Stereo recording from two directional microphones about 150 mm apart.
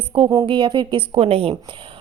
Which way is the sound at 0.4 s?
30° right (ahead or behind).